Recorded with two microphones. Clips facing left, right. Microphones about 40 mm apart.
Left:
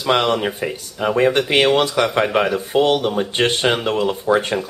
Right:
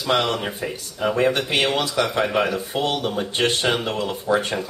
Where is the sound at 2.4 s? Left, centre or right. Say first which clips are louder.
Left 6 dB; centre.